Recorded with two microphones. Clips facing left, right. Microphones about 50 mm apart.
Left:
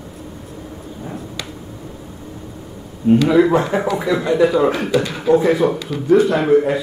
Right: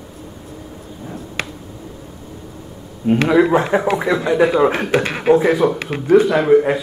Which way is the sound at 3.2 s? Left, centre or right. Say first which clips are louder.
Even; centre.